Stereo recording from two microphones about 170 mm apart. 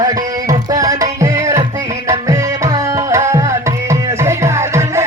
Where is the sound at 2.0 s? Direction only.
20° right (ahead or behind).